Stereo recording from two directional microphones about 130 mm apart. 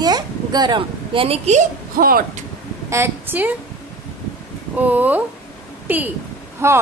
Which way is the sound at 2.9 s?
15° right (ahead or behind).